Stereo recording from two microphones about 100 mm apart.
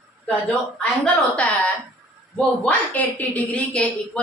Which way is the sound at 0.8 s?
10° left (ahead or behind).